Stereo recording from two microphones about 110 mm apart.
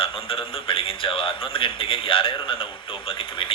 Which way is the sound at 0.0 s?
55° left (ahead or behind).